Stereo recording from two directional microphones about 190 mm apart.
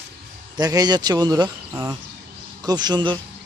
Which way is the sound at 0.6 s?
20° right (ahead or behind).